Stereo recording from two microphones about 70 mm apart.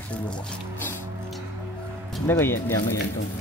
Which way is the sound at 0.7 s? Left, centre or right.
Left.